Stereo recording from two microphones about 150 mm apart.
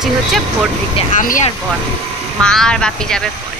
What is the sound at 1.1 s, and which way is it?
Speech, 60° left (ahead or behind).